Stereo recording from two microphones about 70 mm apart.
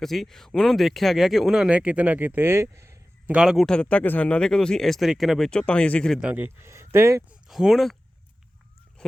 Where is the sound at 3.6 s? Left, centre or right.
Centre.